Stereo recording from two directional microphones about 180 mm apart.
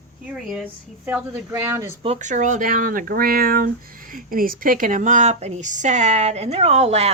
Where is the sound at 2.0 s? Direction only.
40° right (ahead or behind).